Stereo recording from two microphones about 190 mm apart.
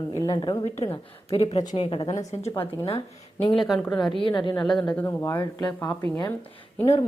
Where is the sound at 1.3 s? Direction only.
35° left (ahead or behind).